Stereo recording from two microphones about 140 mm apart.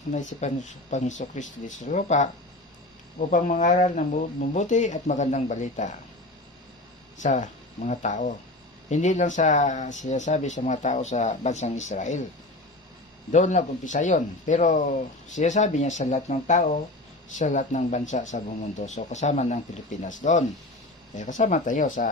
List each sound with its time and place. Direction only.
0.1 s speech: 60° left (ahead or behind)
7.2 s speech: 60° left (ahead or behind)
13.3 s speech: 60° left (ahead or behind)